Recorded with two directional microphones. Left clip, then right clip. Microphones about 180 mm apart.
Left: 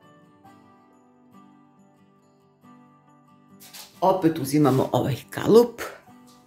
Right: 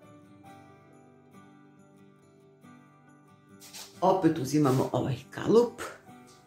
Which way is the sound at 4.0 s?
30° left (ahead or behind).